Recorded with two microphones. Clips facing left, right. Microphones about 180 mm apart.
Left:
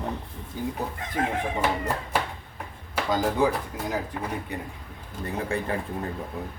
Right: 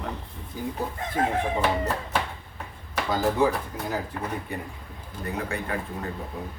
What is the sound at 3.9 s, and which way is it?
Speech, 20° left (ahead or behind).